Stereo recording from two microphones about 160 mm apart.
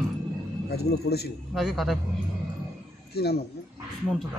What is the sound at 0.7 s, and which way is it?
Speech, 85° left.